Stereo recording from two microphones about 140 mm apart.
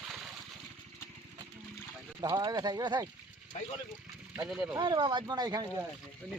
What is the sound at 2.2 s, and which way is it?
Speech, 30° right (ahead or behind).